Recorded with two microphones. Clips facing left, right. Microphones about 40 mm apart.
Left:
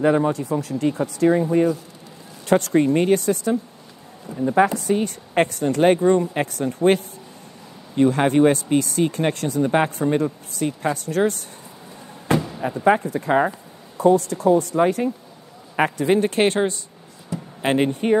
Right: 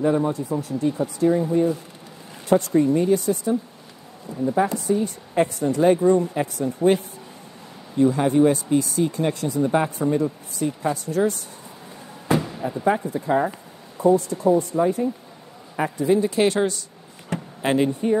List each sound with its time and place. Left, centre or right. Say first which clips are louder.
0.0 s speech: left 3 dB; left
1.0 s a woman's voice: left 3 dB; left
4.3 s speech: left 1 dB; left
4.7 s a woman's voice: left 1 dB; left
9.6 s speech: left 2 dB; left
12.3 s a sound: left 1 dB; centre
12.8 s a woman's voice: left 4 dB; left
13.9 s speech: left 2 dB; left
15.7 s speech: left 2 dB; left
17.3 s a sound: right 2 dB; right
17.6 s speech: left 1 dB; left